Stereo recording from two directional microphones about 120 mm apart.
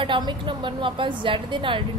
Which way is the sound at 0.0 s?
40° right (ahead or behind).